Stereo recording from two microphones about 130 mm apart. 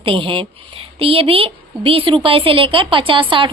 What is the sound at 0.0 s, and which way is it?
A woman's voice, 40° right (ahead or behind).